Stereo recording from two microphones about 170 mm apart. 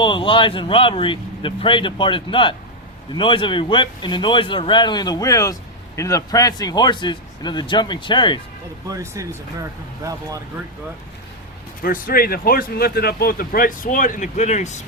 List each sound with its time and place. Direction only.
0.0 s speech: 30° left (ahead or behind)
8.9 s speech: 20° right (ahead or behind)
11.8 s speech: 55° left (ahead or behind)